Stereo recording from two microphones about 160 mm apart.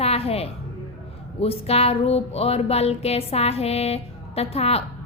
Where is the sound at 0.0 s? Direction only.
40° left (ahead or behind).